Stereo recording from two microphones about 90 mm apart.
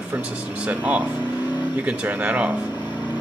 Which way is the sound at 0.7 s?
15° right (ahead or behind).